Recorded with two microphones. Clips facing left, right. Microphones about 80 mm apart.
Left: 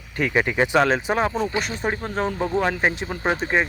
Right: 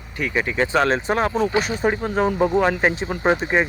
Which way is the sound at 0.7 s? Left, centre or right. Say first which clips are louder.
Right 1 dB; centre.